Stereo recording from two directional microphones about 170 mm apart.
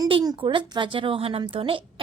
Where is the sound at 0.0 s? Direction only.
25° right (ahead or behind).